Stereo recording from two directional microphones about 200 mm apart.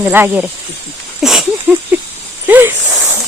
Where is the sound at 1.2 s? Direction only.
Centre (ahead or behind).